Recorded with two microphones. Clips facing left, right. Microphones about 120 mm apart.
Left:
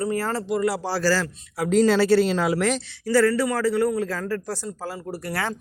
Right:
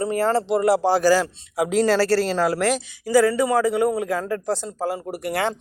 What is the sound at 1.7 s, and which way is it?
Speech, centre (ahead or behind).